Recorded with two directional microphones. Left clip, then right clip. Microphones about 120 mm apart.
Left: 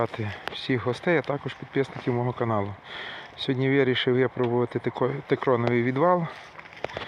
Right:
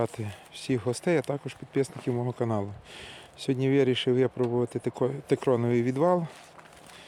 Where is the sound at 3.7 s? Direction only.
25° right (ahead or behind).